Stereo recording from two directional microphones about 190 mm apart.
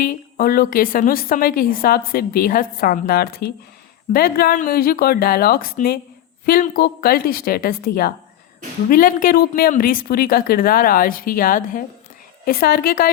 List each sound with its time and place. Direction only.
0.0 s a woman's voice: 50° left (ahead or behind)